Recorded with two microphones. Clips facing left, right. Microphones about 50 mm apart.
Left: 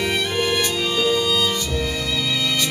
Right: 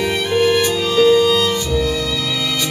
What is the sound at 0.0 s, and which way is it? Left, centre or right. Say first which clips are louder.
Music: right 5 dB; centre.